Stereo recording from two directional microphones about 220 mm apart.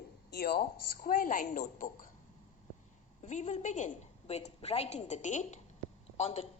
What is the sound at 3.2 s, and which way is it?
A woman's voice, 30° left (ahead or behind).